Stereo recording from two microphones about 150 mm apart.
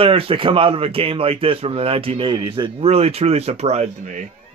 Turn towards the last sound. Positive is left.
turn(degrees=-45)  # may be behind; listen again after turning